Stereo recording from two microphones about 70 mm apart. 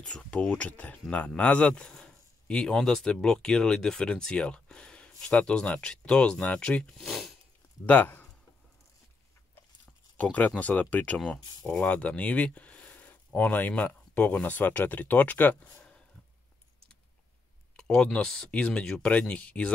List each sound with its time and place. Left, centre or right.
0.1 s speech: centre
7.0 s zipper: centre
7.8 s speech: left
10.3 s speech: left
11.1 s speech: centre; by 15.7 s left
17.7 s speech: centre